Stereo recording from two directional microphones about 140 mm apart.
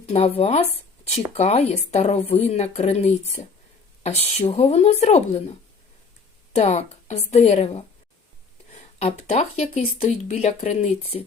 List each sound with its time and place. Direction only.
0.0 s speech: 45° left (ahead or behind)